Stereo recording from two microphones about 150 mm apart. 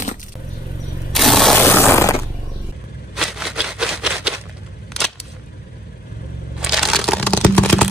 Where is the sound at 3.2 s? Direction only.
5° right (ahead or behind).